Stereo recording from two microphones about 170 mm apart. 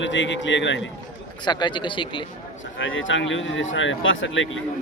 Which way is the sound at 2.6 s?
90° left.